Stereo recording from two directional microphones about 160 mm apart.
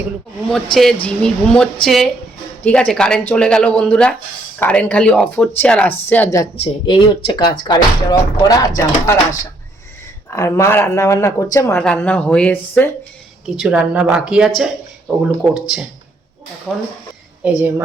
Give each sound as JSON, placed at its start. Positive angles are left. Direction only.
{"t": 0.5, "sound": "speech", "side_deg": 0}
{"t": 6.6, "sound": "speech", "side_deg": 30}
{"t": 11.8, "sound": "speech", "side_deg": 5}
{"t": 13.6, "sound": "speech", "side_deg": -5}
{"t": 17.4, "sound": "a woman's voice", "side_deg": -10}